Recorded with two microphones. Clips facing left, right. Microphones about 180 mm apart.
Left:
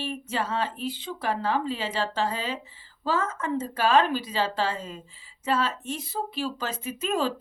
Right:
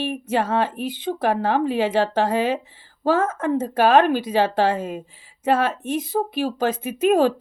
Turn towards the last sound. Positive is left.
turn(degrees=-55)  # may be behind; listen again after turning